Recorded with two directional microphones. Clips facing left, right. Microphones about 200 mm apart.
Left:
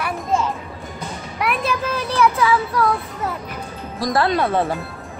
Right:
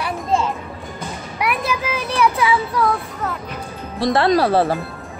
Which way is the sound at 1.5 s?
10° right (ahead or behind).